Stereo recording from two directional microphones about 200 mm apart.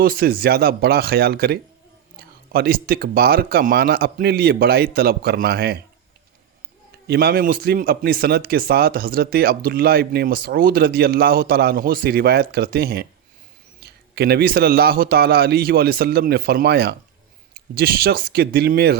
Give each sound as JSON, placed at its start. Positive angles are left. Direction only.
{"t": 0.0, "sound": "a man's voice", "side_deg": -50}
{"t": 7.1, "sound": "a man's voice", "side_deg": -50}